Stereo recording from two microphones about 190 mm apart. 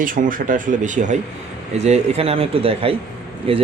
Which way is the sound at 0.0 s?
45° right (ahead or behind).